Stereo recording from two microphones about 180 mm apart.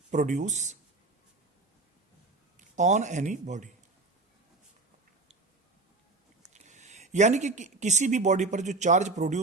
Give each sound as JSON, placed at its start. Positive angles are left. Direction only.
{"t": 0.1, "sound": "a man's voice", "side_deg": -40}
{"t": 2.6, "sound": "speech", "side_deg": -40}
{"t": 6.5, "sound": "speech", "side_deg": -40}